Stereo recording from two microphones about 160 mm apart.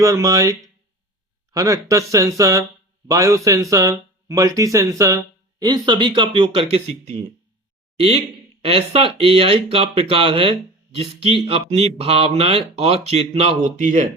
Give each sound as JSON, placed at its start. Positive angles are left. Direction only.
{"t": 0.0, "sound": "speech", "side_deg": -20}
{"t": 1.5, "sound": "speech", "side_deg": -20}